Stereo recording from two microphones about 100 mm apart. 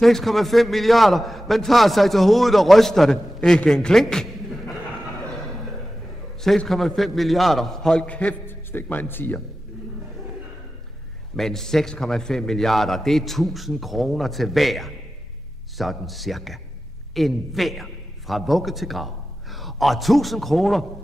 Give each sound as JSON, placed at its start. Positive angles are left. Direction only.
{"t": 0.0, "sound": "a man's voice", "side_deg": 0}
{"t": 6.4, "sound": "a man's voice", "side_deg": 5}
{"t": 11.3, "sound": "a man's voice", "side_deg": 5}